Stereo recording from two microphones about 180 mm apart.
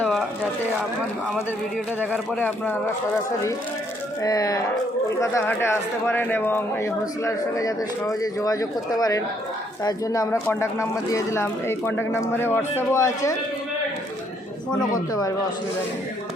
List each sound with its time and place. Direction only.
0.0 s a sound: centre (ahead or behind)
2.3 s speech: 10° left (ahead or behind)
4.2 s speech: 20° left (ahead or behind)
14.9 s speech: 20° left (ahead or behind)